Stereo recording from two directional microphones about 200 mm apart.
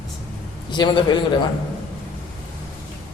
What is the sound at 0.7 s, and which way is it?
Speech, 20° left (ahead or behind).